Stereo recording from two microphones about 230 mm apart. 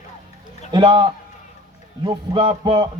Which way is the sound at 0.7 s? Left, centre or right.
Centre.